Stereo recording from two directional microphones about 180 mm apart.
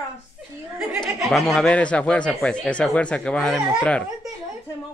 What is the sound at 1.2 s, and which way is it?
Speech, centre (ahead or behind).